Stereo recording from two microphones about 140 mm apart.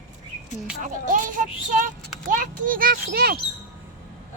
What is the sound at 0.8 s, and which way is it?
Child singing, 70° right (ahead or behind).